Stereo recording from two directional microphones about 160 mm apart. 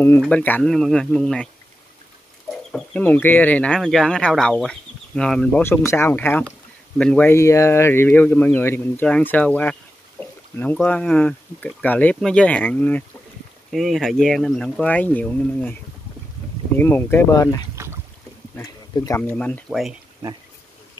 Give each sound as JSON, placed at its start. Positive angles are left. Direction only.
{"t": 0.2, "sound": "speech", "side_deg": 10}
{"t": 2.5, "sound": "speech", "side_deg": 5}
{"t": 17.8, "sound": "boat", "side_deg": -15}
{"t": 18.6, "sound": "speech", "side_deg": 20}